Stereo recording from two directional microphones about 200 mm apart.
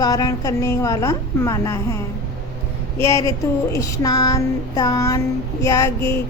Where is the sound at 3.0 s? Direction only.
15° left (ahead or behind).